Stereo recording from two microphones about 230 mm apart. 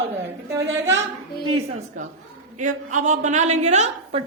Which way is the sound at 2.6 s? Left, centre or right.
Right.